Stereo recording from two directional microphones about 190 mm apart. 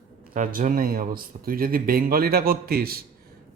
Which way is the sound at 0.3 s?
45° right (ahead or behind).